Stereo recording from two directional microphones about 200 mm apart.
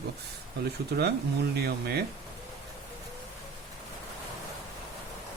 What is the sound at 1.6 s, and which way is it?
Speech, 55° right (ahead or behind).